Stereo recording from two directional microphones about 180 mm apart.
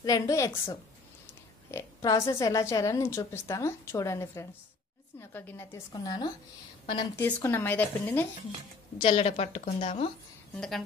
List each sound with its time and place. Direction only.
0.0 s speech: 20° left (ahead or behind)
7.2 s speech: 10° left (ahead or behind)
8.9 s a woman's voice: 30° left (ahead or behind)
10.5 s a woman's voice: 5° left (ahead or behind)